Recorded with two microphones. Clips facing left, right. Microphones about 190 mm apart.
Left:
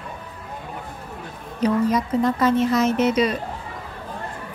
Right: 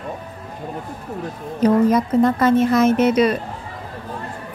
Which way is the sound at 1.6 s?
50° right (ahead or behind).